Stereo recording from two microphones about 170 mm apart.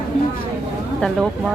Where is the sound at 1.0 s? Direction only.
Centre (ahead or behind).